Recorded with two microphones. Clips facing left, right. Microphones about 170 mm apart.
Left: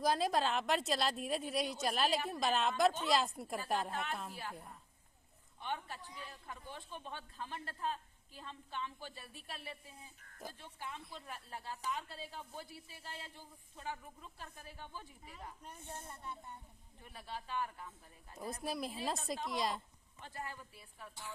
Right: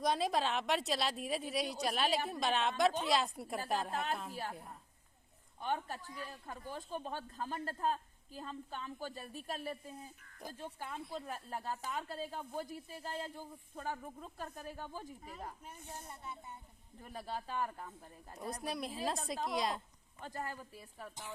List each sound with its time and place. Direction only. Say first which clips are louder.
0.0 s a woman's voice: even; centre (ahead or behind)
3.9 s speech: right 3 dB; 40° right (ahead or behind)
5.5 s a man's voice: right 4 dB; 45° right (ahead or behind)
10.2 s a sound: even; 45° left (ahead or behind)
10.6 s speech: right 4 dB; 50° right (ahead or behind)
15.9 s a woman's voice: even; centre (ahead or behind)
17.0 s speech: right 5 dB; 40° right (ahead or behind)
18.3 s a woman's voice: even; centre (ahead or behind)
20.2 s speech: right 4 dB; 40° right (ahead or behind)